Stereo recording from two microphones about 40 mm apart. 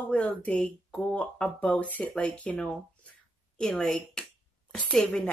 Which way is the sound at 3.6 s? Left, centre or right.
Left.